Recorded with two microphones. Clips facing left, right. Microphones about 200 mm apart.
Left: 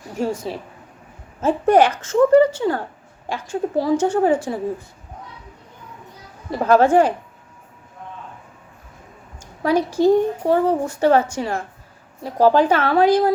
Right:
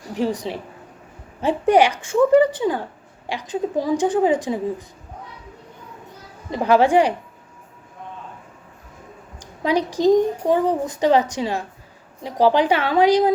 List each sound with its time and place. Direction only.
0.2 s speech: 15° right (ahead or behind)
6.5 s speech: 15° right (ahead or behind)
9.4 s a woman's voice: 15° right (ahead or behind)